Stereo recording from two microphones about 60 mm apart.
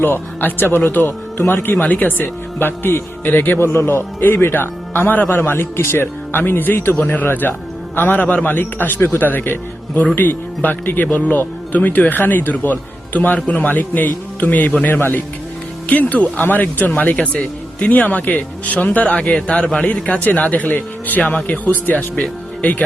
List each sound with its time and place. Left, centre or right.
0.0 s speech: left
1.8 s speech: left
14.9 s speech: left
15.9 s speech: left